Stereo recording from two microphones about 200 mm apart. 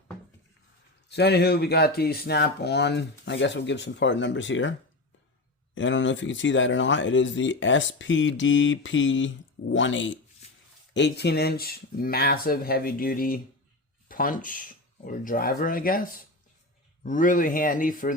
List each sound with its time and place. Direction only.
1.1 s speech: 55° left (ahead or behind)
5.7 s speech: 70° left (ahead or behind)
10.9 s speech: 60° left (ahead or behind); by 18.1 s 40° left (ahead or behind)